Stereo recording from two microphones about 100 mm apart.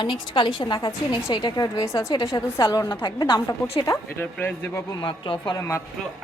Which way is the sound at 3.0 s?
50° left (ahead or behind).